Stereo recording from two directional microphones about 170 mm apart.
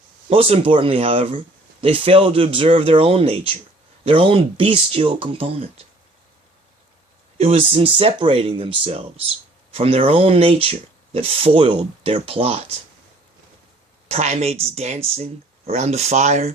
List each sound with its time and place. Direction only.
0.3 s speech: 35° right (ahead or behind)
7.3 s speech: 35° right (ahead or behind)
14.1 s speech: 40° right (ahead or behind)